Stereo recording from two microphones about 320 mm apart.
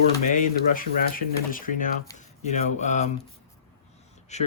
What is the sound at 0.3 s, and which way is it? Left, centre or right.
Speech, left.